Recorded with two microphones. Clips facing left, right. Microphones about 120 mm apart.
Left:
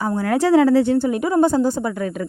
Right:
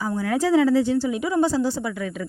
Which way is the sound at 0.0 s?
55° left (ahead or behind).